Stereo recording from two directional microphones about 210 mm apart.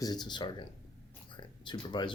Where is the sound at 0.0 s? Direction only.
20° left (ahead or behind).